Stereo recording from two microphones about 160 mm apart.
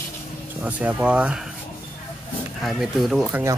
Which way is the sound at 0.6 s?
10° right (ahead or behind).